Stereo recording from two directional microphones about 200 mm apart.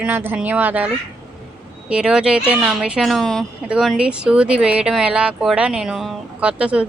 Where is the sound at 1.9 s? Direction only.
5° right (ahead or behind).